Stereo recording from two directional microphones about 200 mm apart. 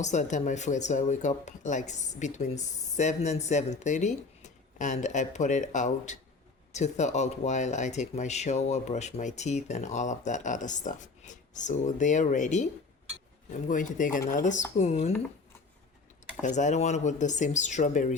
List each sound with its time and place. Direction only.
0.0 s speech: 35° left (ahead or behind)
13.7 s speech: 40° left (ahead or behind)
16.4 s speech: 35° left (ahead or behind)